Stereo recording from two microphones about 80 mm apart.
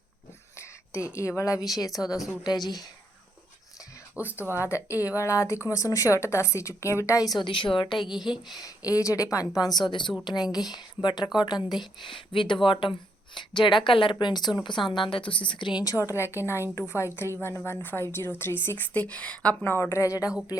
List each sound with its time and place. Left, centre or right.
0.5 s a woman's voice: left
4.1 s speech: right
4.5 s speech: left
7.3 s speech: left
8.1 s speech: centre
8.5 s speech: left
9.6 s speech: left
10.2 s speech: left
15.8 s speech: left
16.1 s a woman's voice: left; by 19.5 s centre
19.6 s speech: left